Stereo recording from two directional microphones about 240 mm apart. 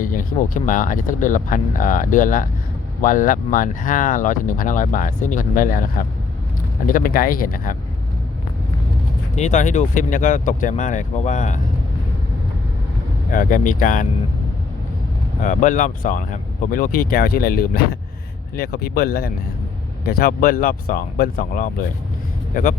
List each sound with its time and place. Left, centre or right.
0.0 s speech: left
9.3 s speech: left
13.3 s speech: left
15.4 s speech: left